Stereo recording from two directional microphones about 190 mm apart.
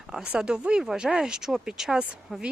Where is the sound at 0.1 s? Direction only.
5° right (ahead or behind).